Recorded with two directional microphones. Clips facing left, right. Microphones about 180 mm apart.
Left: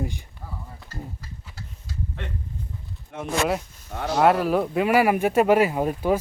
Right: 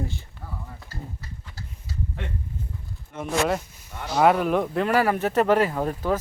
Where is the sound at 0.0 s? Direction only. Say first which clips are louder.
Left 2 dB; 15° left (ahead or behind).